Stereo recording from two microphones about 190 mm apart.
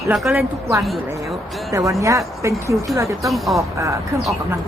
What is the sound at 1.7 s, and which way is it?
Speech, 15° right (ahead or behind).